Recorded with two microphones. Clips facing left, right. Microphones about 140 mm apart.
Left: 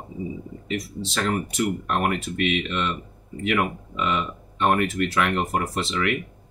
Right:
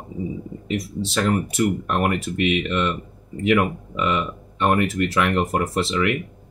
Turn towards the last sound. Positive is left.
turn(degrees=0)  # may be behind; listen again after turning